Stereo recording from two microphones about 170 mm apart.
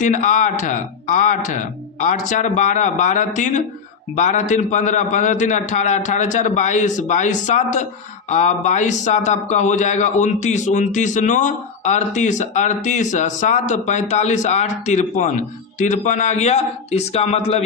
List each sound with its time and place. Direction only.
0.0 s a man's voice: 45° left (ahead or behind)